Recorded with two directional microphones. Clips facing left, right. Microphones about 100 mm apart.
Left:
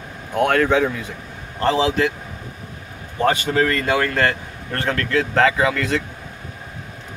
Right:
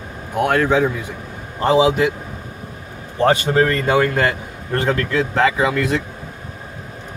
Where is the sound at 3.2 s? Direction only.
30° right (ahead or behind).